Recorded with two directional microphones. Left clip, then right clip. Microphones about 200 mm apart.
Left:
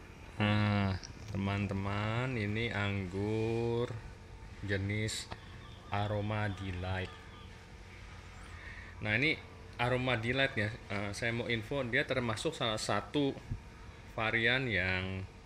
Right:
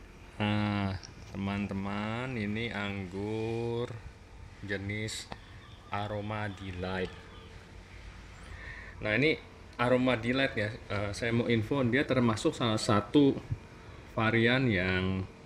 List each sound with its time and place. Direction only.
0.4 s a sound: 10° right (ahead or behind)
4.6 s a man's voice: 20° right (ahead or behind)
9.0 s a man's voice: 25° right (ahead or behind)